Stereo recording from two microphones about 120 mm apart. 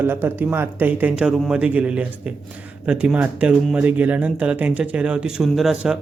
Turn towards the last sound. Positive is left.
turn(degrees=-5)  # may be behind; listen again after turning